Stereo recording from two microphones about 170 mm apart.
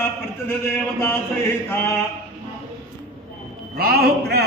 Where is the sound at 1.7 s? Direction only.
15° left (ahead or behind).